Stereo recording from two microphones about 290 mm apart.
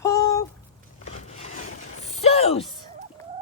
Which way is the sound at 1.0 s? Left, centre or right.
Left.